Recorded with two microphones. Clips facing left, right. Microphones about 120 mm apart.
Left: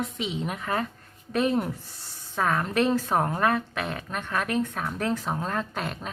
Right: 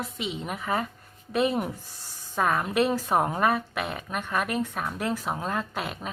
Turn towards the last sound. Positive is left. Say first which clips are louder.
# even
turn(degrees=-5)  # may be behind; listen again after turning